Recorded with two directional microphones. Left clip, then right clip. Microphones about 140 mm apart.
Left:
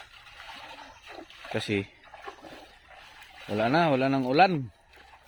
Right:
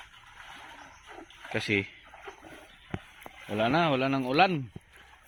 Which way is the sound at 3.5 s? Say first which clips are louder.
Left 2 dB; 35° left (ahead or behind).